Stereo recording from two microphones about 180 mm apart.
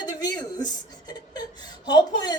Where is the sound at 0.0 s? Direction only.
20° left (ahead or behind).